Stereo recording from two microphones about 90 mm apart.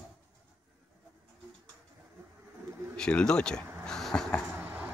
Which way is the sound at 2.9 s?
10° left (ahead or behind).